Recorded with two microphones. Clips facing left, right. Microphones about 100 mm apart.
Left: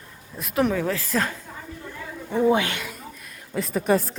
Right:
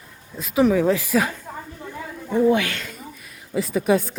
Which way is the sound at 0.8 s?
15° right (ahead or behind).